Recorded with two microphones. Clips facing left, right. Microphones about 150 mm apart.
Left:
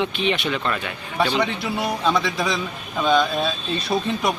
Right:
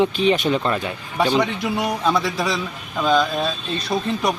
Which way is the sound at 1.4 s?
10° right (ahead or behind).